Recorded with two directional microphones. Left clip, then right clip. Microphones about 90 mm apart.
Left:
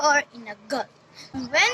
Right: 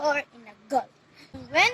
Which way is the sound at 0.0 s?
35° left (ahead or behind).